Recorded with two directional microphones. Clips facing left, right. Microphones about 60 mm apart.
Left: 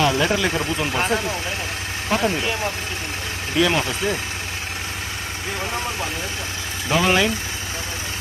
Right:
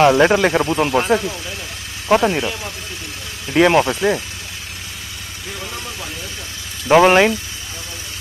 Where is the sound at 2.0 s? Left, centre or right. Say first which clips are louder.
Right 6 dB; right.